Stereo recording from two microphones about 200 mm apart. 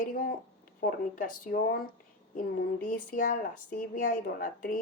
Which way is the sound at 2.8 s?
40° left (ahead or behind).